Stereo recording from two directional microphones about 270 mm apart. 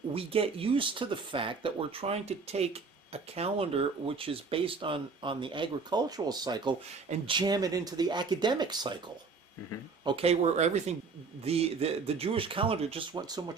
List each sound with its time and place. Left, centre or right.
0.1 s speech: right
10.0 s speech: centre